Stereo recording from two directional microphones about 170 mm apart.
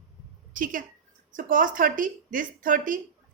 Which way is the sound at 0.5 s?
50° right (ahead or behind).